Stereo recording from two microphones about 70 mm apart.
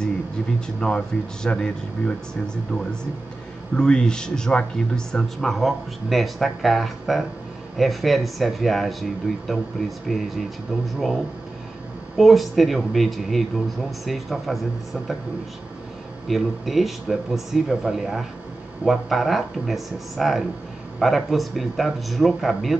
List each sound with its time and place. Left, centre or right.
0.7 s speech: centre
12.2 s speech: centre
16.3 s speech: centre